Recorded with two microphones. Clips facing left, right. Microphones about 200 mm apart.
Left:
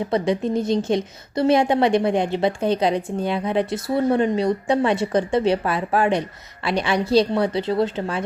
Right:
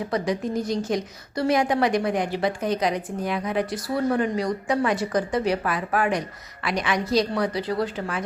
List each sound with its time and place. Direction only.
0.1 s a woman's voice: 25° left (ahead or behind)